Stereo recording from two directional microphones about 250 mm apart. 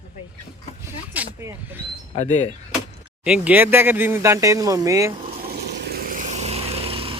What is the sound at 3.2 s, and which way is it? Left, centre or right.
Speech, centre.